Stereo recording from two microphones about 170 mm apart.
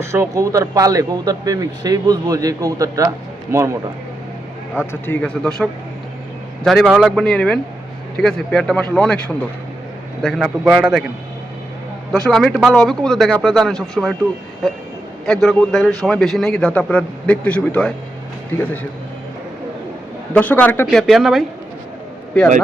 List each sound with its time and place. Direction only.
0.0 s speech: 15° right (ahead or behind)
4.8 s speech: 10° left (ahead or behind)
6.7 s a man's voice: centre (ahead or behind)
12.2 s a man's voice: 5° left (ahead or behind)
15.3 s a man's voice: centre (ahead or behind)
20.3 s speech: 10° left (ahead or behind)
20.8 s a man's voice: centre (ahead or behind)